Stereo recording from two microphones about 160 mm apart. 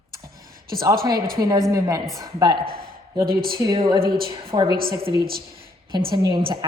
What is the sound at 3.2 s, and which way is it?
Speech, 70° right (ahead or behind).